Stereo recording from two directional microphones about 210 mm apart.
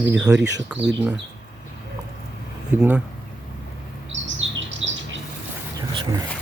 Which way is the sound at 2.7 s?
5° right (ahead or behind).